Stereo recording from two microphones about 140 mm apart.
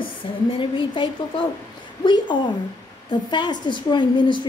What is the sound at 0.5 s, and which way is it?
A woman's voice, 35° left (ahead or behind).